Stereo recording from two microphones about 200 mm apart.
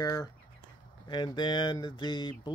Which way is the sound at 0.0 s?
15° left (ahead or behind).